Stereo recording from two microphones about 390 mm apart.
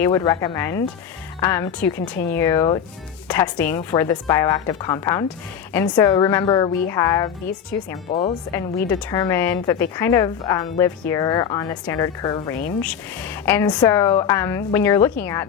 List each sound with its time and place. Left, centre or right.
0.0 s a woman's voice: centre
2.0 s speech: left
2.3 s a woman's voice: centre
8.1 s a woman's voice: centre
8.9 s a woman's voice: centre